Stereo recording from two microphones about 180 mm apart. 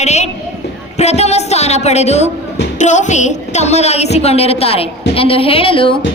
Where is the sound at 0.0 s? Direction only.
40° left (ahead or behind).